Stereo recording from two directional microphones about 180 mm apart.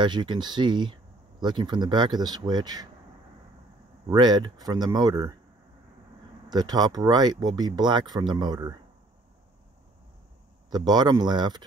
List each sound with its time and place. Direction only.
0.0 s speech: 25° right (ahead or behind)
4.1 s speech: 25° right (ahead or behind)
6.5 s speech: 20° right (ahead or behind)
10.7 s speech: 25° right (ahead or behind)